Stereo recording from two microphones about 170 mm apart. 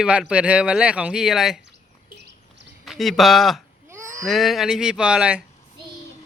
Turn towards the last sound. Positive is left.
turn(degrees=-5)  # may be behind; listen again after turning